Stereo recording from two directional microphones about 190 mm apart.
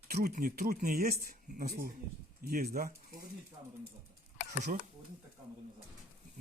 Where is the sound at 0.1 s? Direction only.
50° right (ahead or behind).